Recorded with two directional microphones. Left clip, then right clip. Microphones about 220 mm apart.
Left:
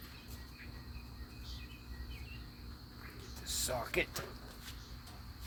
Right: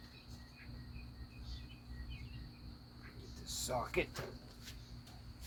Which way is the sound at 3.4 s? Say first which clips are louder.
Left 2 dB; 15° left (ahead or behind).